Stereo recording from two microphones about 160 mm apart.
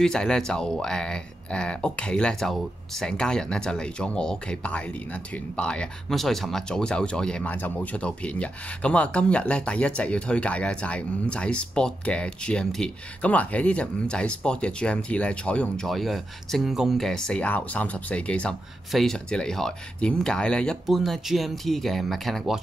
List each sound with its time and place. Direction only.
0.0 s speech: 5° left (ahead or behind)